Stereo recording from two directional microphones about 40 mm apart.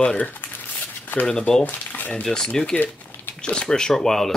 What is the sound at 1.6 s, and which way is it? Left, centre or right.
Speech, left.